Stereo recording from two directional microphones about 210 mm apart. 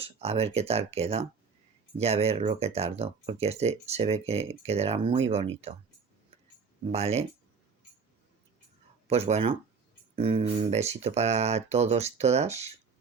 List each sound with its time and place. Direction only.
0.0 s speech: 30° right (ahead or behind)
6.8 s speech: 30° right (ahead or behind)
9.0 s speech: 30° right (ahead or behind)